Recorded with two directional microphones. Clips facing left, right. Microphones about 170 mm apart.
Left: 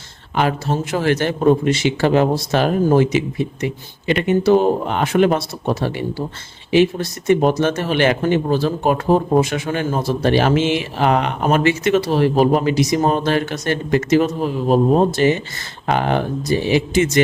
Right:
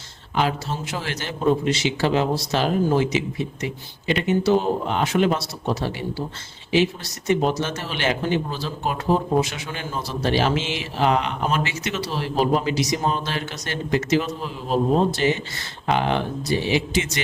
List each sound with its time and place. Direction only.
0.3 s a man's voice: 55° left (ahead or behind)